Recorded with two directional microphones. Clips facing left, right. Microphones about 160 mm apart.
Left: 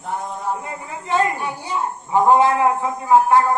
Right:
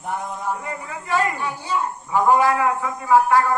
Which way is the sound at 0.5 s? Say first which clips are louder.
Left 1 dB; 25° left (ahead or behind).